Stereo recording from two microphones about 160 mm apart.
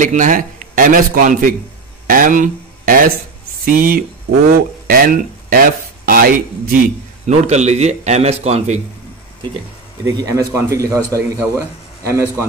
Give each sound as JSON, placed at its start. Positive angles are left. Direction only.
{"t": 0.0, "sound": "a man's voice", "side_deg": -55}
{"t": 2.0, "sound": "a sound", "side_deg": -55}
{"t": 3.6, "sound": "a man's voice", "side_deg": -60}
{"t": 7.2, "sound": "a man's voice", "side_deg": -45}
{"t": 10.0, "sound": "a man's voice", "side_deg": -20}